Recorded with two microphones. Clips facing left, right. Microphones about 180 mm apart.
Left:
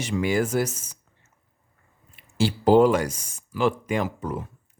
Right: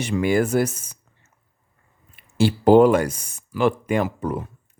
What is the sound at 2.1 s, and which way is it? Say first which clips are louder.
Speech: right 4 dB; 55° right (ahead or behind).